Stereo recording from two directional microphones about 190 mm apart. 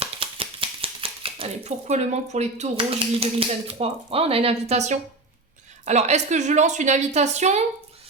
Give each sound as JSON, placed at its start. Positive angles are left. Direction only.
{"t": 0.0, "sound": "a woman's voice", "side_deg": -30}